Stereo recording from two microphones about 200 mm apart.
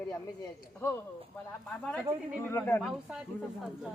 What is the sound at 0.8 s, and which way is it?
Speech, 10° left (ahead or behind).